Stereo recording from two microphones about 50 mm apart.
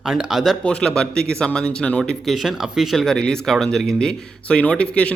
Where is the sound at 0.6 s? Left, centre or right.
Centre.